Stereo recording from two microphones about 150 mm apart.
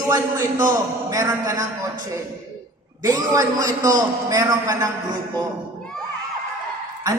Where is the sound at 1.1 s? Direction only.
20° right (ahead or behind).